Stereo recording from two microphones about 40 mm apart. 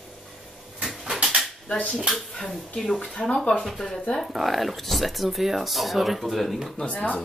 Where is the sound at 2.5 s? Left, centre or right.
Centre.